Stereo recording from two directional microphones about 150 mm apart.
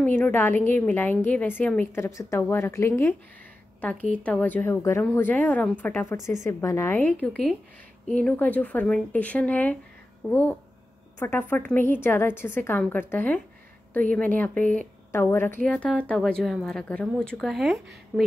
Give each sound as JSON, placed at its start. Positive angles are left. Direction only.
{"t": 0.0, "sound": "a woman's voice", "side_deg": 10}